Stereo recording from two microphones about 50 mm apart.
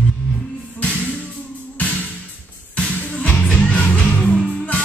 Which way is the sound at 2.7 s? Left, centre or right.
Left.